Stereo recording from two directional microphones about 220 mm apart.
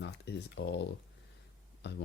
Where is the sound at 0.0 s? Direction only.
50° left (ahead or behind).